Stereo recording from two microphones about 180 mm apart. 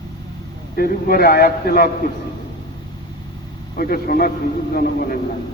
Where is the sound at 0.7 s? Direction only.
55° left (ahead or behind).